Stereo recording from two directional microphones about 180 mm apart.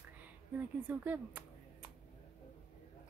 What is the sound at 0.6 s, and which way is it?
Speech, 10° right (ahead or behind).